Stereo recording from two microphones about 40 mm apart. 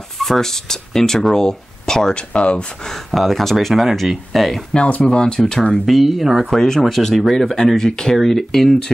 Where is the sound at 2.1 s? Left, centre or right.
Left.